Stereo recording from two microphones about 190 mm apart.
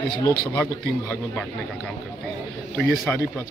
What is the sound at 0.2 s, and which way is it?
Speech, 20° left (ahead or behind).